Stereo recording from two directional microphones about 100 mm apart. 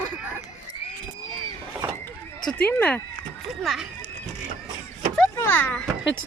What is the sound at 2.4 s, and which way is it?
Speech, 15° left (ahead or behind).